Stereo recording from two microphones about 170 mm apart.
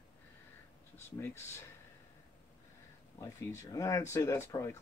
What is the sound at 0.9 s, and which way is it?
Speech, 15° left (ahead or behind).